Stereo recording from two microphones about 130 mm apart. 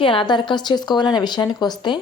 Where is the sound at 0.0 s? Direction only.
40° left (ahead or behind).